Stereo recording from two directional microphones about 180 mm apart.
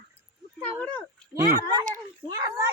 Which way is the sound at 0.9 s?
20° right (ahead or behind).